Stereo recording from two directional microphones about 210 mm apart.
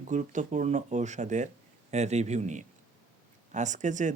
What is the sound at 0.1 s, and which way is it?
Speech, 35° right (ahead or behind).